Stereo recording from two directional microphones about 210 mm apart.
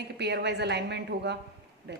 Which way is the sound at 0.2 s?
55° right (ahead or behind).